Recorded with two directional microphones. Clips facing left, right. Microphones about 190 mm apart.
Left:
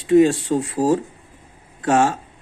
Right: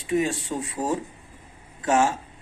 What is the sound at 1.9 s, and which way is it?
Speech, 60° left (ahead or behind).